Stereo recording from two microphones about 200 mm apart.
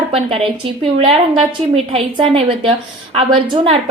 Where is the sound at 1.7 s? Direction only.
25° right (ahead or behind).